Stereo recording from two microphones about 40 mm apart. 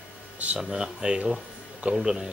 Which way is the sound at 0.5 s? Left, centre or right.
Centre.